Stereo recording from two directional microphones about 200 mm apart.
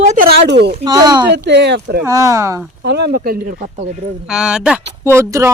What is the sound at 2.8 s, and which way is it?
Speech, 55° right (ahead or behind).